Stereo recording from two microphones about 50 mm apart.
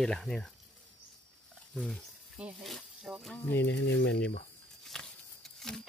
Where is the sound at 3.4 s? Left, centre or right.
Left.